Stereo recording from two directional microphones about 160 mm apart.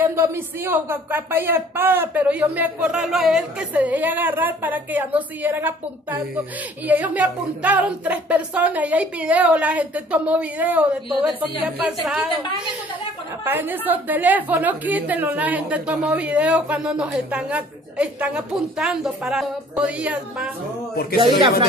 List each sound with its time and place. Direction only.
0.0 s a woman's voice: 15° right (ahead or behind)
13.4 s a woman's voice: 10° right (ahead or behind)
20.9 s speech: 75° left (ahead or behind)